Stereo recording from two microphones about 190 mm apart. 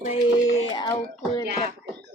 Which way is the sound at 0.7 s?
20° left (ahead or behind).